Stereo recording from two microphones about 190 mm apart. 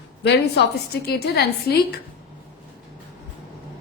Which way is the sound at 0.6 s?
60° left (ahead or behind).